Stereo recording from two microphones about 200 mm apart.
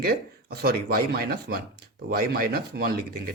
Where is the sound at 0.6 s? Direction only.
50° right (ahead or behind).